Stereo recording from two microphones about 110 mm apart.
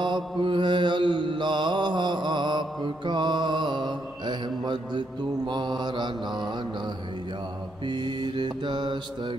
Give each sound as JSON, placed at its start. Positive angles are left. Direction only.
{"t": 0.0, "sound": "mantra", "side_deg": -45}
{"t": 7.9, "sound": "mantra", "side_deg": -45}